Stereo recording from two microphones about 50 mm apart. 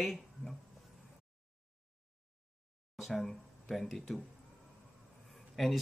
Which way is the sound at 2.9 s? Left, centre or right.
Centre.